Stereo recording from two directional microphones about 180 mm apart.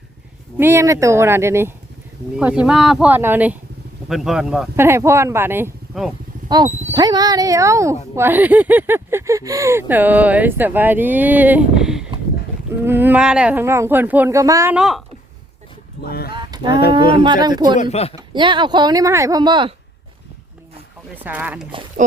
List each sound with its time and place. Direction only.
0.5 s speech: 10° right (ahead or behind)
6.9 s speech: 20° right (ahead or behind)
14.8 s speech: centre (ahead or behind)
16.0 s speech: 60° left (ahead or behind)
16.3 s a sound: 25° right (ahead or behind)
17.2 s speech: 25° right (ahead or behind)
17.9 s speech: 35° left (ahead or behind)
18.2 s speech: 25° right (ahead or behind)
21.2 s speech: 10° right (ahead or behind)